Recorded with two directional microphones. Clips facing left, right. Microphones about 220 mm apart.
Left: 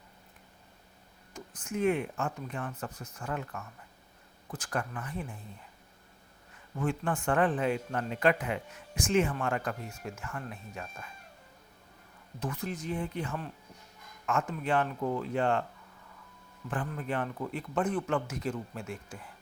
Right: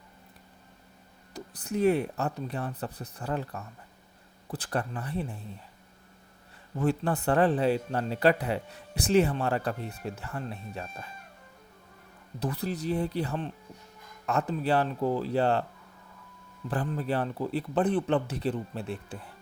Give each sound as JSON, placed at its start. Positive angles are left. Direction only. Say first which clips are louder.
{"t": 1.3, "sound": "speech", "louder": "right 4 dB", "side_deg": -35}
{"t": 6.7, "sound": "speech", "louder": "right 4 dB", "side_deg": -35}
{"t": 12.4, "sound": "speech", "louder": "right 4 dB", "side_deg": -35}
{"t": 16.6, "sound": "speech", "louder": "right 5 dB", "side_deg": -35}